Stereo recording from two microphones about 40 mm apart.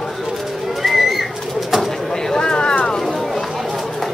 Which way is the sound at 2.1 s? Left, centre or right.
Centre.